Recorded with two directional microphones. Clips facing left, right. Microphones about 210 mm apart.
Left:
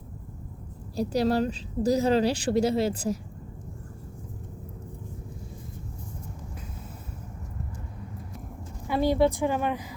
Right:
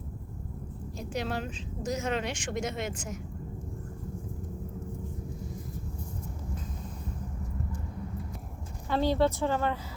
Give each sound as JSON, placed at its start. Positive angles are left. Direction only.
{"t": 0.9, "sound": "a woman's voice", "side_deg": 35}
{"t": 8.9, "sound": "a woman's voice", "side_deg": 10}